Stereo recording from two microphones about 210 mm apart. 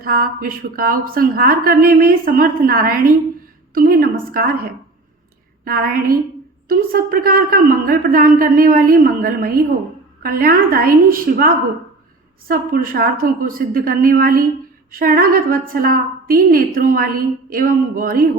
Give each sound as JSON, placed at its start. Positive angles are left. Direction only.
{"t": 0.0, "sound": "a woman's voice", "side_deg": -45}
{"t": 5.6, "sound": "a woman's voice", "side_deg": -45}